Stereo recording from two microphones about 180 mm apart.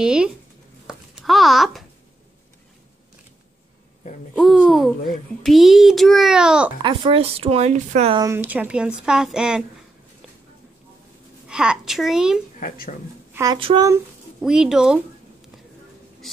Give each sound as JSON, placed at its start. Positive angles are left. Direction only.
{"t": 0.0, "sound": "a child's voice", "side_deg": -5}
{"t": 0.8, "sound": "a sound", "side_deg": 0}
{"t": 4.4, "sound": "a child's voice", "side_deg": 0}
{"t": 6.8, "sound": "speech", "side_deg": -25}
{"t": 8.1, "sound": "speech", "side_deg": -20}
{"t": 8.4, "sound": "a child's voice", "side_deg": -10}
{"t": 11.4, "sound": "a child's voice", "side_deg": -5}
{"t": 12.5, "sound": "speech", "side_deg": 50}
{"t": 13.3, "sound": "speech", "side_deg": -20}
{"t": 13.6, "sound": "speech", "side_deg": -30}
{"t": 14.4, "sound": "a child's voice", "side_deg": -5}